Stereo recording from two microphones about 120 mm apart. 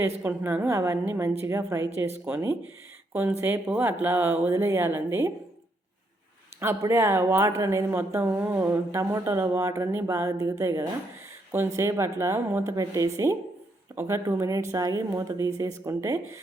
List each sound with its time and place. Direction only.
0.2 s a woman's voice: 15° right (ahead or behind)
6.6 s a woman's voice: 20° right (ahead or behind)